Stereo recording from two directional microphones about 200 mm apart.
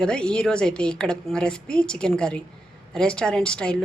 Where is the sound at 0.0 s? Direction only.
5° left (ahead or behind).